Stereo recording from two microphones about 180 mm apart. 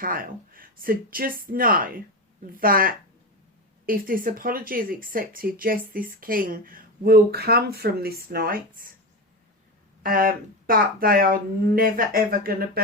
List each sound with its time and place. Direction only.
0.0 s speech: 50° right (ahead or behind)
10.0 s speech: 55° right (ahead or behind)